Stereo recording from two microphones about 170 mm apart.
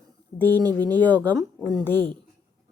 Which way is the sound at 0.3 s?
10° left (ahead or behind).